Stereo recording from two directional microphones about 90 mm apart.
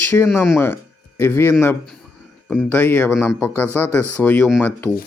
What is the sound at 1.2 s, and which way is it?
Speech, 25° left (ahead or behind).